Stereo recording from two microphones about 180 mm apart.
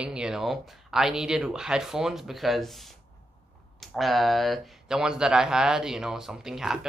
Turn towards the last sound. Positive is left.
turn(degrees=-5)  # may be behind; listen again after turning